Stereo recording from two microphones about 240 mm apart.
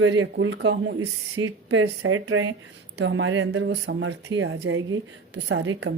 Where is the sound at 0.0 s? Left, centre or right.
Right.